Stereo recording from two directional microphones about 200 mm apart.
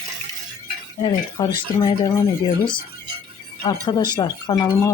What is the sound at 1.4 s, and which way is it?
Speech, 20° left (ahead or behind).